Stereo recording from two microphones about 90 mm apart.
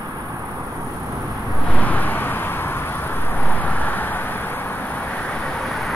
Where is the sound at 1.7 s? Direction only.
15° left (ahead or behind); by 5.9 s centre (ahead or behind).